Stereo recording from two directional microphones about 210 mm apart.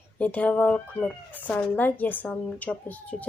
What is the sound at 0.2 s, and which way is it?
Speech, 10° left (ahead or behind).